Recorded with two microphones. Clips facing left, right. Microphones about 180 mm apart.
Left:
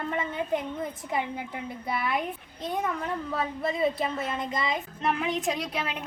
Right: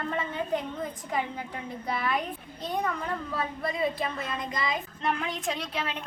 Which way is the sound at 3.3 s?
25° left (ahead or behind).